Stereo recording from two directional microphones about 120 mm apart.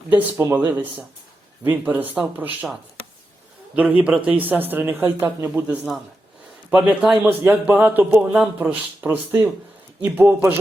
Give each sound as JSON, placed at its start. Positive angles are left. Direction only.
{"t": 0.1, "sound": "a man's voice", "side_deg": -15}
{"t": 3.8, "sound": "a man's voice", "side_deg": -10}